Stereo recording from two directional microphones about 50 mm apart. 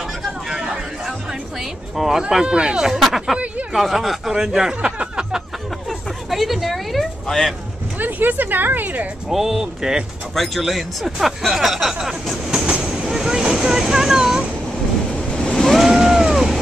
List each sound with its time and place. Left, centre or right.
0.5 s a sound: centre
1.6 s speech: centre
2.9 s speech: centre
4.8 s a sound: right
5.9 s a sound: centre
8.0 s speech: right
9.3 s speech: centre
10.3 s speech: centre
12.8 s vehicle: centre
15.3 s vehicle: centre
15.8 s vehicle: centre